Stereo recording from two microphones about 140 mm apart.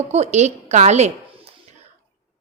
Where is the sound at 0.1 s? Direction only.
50° right (ahead or behind).